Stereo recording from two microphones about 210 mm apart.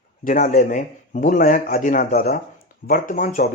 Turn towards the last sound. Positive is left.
turn(degrees=40)  # may be behind; listen again after turning